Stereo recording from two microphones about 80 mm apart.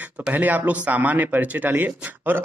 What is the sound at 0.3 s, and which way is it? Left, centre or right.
Speech, right.